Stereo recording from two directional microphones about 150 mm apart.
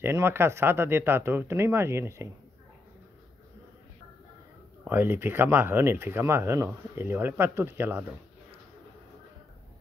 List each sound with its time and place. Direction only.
0.0 s speech: 15° right (ahead or behind)
4.8 s speech: 15° right (ahead or behind)